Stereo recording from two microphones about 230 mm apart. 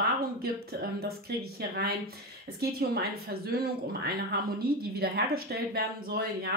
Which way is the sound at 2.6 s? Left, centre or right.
Right.